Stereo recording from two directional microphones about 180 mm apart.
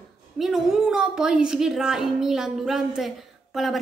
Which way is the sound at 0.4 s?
Centre (ahead or behind).